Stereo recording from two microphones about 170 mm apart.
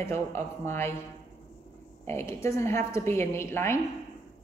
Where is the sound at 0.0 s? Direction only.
15° left (ahead or behind).